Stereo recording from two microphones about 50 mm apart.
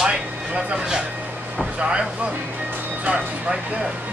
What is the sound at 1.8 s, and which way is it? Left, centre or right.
Speech, centre.